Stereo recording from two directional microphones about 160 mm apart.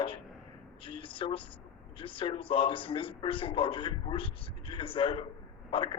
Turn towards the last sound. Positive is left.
turn(degrees=30)  # may be behind; listen again after turning